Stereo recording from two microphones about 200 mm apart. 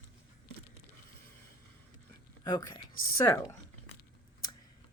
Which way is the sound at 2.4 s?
20° left (ahead or behind).